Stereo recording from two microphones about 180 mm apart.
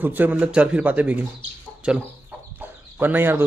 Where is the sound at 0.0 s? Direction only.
10° right (ahead or behind).